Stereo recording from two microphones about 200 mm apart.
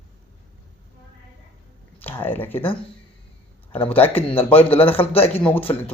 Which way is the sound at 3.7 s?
10° left (ahead or behind).